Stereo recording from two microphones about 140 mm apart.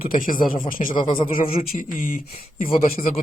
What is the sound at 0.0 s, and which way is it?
Speech, 85° left.